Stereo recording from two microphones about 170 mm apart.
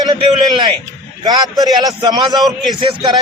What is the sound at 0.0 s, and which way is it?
A man's voice, 25° right (ahead or behind).